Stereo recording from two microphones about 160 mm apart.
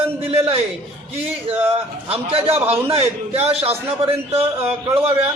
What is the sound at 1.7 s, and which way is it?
A man's voice, 35° right (ahead or behind).